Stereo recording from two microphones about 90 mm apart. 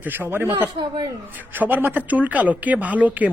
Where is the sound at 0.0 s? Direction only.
20° right (ahead or behind).